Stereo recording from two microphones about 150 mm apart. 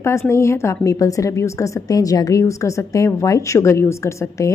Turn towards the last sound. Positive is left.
turn(degrees=20)  # may be behind; listen again after turning